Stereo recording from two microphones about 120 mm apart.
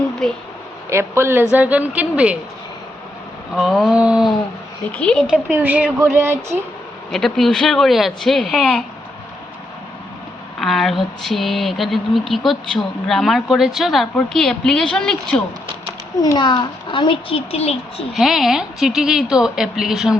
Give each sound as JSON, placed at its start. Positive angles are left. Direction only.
{"t": 0.2, "sound": "a woman's voice", "side_deg": 5}
{"t": 0.9, "sound": "a woman's voice", "side_deg": -20}
{"t": 3.5, "sound": "a woman's voice", "side_deg": 0}
{"t": 3.9, "sound": "a sound", "side_deg": -10}
{"t": 4.9, "sound": "a woman's voice", "side_deg": 5}
{"t": 5.5, "sound": "a woman's voice", "side_deg": -15}
{"t": 7.1, "sound": "a woman's voice", "side_deg": 0}
{"t": 10.6, "sound": "a woman's voice", "side_deg": 0}
{"t": 16.2, "sound": "a child's voice", "side_deg": 35}
{"t": 18.1, "sound": "a woman's voice", "side_deg": 0}